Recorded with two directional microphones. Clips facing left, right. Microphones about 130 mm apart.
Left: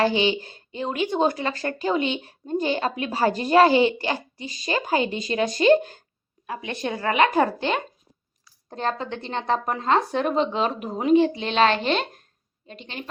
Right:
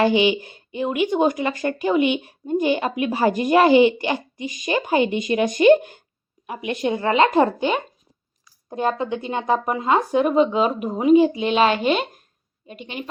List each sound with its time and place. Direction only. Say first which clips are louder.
0.0 s a woman's voice: right 4 dB; 15° right (ahead or behind)
8.7 s speech: right 5 dB; 10° right (ahead or behind)